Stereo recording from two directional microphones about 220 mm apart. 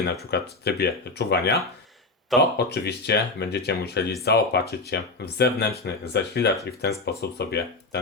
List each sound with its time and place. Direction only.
0.0 s speech: 45° left (ahead or behind)
2.6 s speech: 50° left (ahead or behind)